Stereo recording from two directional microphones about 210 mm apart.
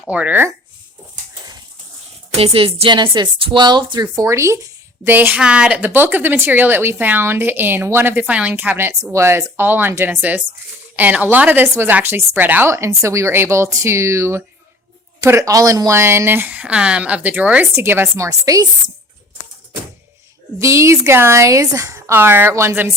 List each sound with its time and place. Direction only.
0.0 s a woman's voice: 5° right (ahead or behind)
2.4 s a woman's voice: 25° right (ahead or behind)
20.6 s a woman's voice: 15° right (ahead or behind)